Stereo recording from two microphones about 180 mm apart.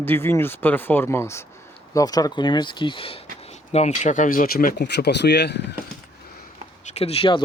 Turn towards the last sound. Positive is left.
turn(degrees=30)  # may be behind; listen again after turning